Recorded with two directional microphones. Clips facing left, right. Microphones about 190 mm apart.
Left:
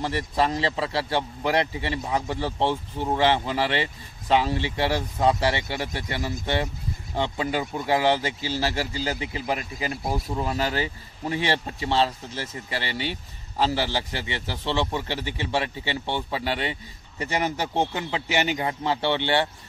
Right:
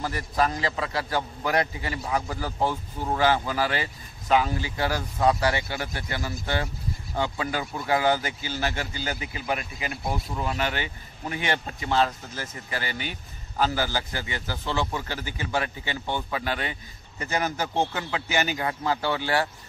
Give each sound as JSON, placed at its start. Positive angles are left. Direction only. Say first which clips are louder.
{"t": 0.0, "sound": "a man's voice", "louder": "left 1 dB", "side_deg": 30}